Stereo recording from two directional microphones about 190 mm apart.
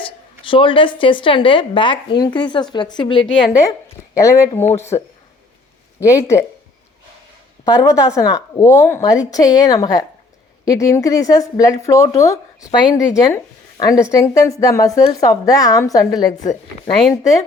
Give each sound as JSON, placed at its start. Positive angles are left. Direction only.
{"t": 0.0, "sound": "a woman's voice", "side_deg": 25}
{"t": 4.1, "sound": "speech", "side_deg": 15}
{"t": 7.6, "sound": "a woman's voice", "side_deg": 20}